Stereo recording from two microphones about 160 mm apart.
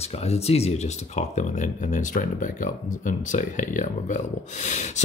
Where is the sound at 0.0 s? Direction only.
40° left (ahead or behind).